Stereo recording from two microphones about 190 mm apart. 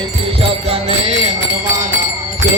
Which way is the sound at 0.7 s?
35° right (ahead or behind).